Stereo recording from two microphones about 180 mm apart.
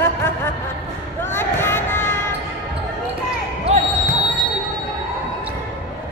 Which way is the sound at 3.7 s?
35° right (ahead or behind).